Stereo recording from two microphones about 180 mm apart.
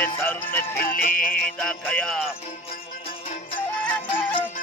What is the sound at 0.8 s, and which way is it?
Music, 55° left (ahead or behind).